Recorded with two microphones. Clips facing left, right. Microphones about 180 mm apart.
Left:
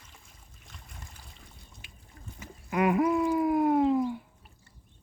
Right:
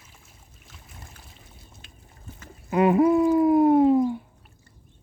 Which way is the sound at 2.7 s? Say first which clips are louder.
Right 6 dB; 30° right (ahead or behind).